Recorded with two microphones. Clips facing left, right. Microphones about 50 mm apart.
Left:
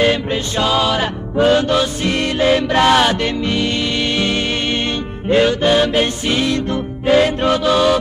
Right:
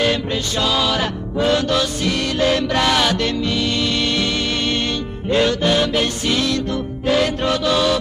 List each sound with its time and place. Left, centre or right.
0.0 s music: left